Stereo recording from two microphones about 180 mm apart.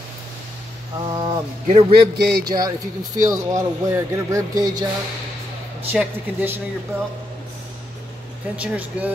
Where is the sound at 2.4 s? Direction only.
20° right (ahead or behind).